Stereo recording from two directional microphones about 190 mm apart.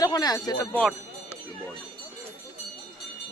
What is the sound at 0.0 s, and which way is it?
Speech, 20° left (ahead or behind).